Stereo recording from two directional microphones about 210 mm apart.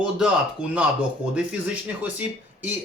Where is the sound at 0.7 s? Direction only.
5° right (ahead or behind).